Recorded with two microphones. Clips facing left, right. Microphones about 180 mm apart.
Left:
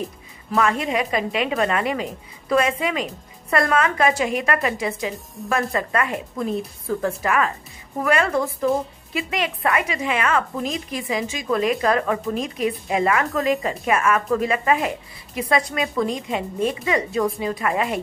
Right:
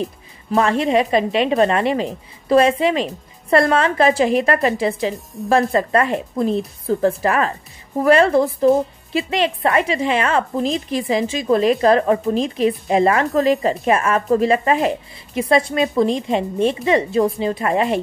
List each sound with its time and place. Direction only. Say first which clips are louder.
0.5 s speech: right 5 dB; 30° right (ahead or behind)
5.1 s a woman's voice: right 5 dB; centre (ahead or behind)
5.5 s speech: right 7 dB; 30° right (ahead or behind)